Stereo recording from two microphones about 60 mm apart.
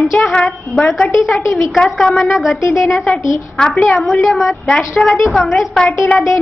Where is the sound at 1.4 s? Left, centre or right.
Left.